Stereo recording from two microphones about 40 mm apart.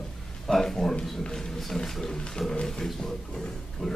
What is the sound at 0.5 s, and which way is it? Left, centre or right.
A man's voice, centre.